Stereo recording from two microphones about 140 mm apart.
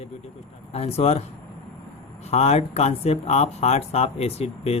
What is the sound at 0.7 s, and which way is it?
Speech, 45° left (ahead or behind).